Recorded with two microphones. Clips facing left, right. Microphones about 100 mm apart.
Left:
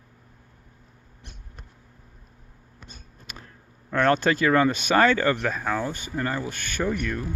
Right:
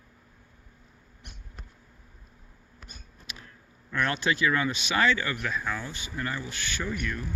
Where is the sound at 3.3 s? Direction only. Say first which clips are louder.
Left 2 dB; 45° left (ahead or behind).